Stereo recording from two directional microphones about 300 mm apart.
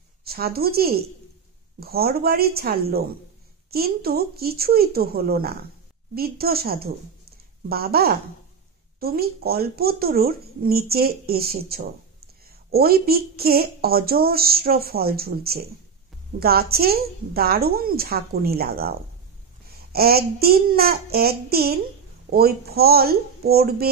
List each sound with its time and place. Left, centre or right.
0.2 s speech: right